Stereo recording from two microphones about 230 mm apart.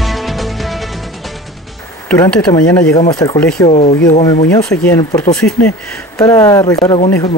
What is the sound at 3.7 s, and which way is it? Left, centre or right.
Speech, left.